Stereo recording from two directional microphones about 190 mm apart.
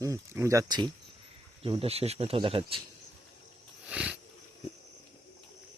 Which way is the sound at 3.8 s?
5° right (ahead or behind).